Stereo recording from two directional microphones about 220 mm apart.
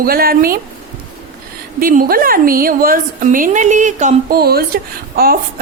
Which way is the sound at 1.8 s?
40° right (ahead or behind).